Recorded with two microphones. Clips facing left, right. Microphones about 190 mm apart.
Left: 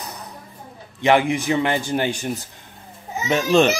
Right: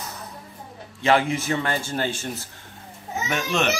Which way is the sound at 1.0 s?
15° left (ahead or behind).